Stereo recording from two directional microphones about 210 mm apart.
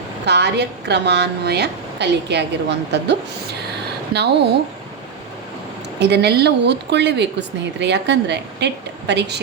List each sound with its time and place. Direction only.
0.3 s speech: 55° right (ahead or behind)
6.0 s speech: 55° right (ahead or behind)